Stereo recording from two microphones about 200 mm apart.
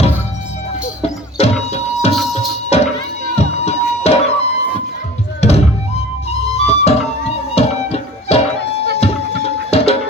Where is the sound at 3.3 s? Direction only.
30° left (ahead or behind).